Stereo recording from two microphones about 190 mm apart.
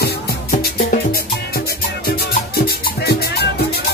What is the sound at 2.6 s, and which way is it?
Music, 55° left (ahead or behind).